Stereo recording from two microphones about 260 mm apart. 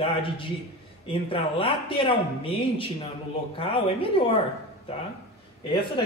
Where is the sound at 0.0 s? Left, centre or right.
Centre.